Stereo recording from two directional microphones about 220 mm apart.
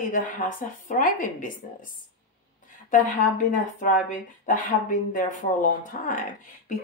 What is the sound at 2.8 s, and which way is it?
Speech, 35° left (ahead or behind).